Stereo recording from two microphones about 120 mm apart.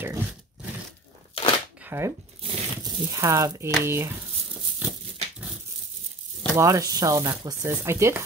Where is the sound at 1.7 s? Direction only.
15° right (ahead or behind).